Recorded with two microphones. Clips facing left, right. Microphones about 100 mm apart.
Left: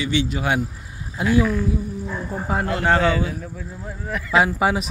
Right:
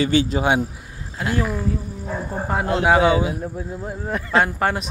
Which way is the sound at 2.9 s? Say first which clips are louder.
Right 3 dB; 15° right (ahead or behind).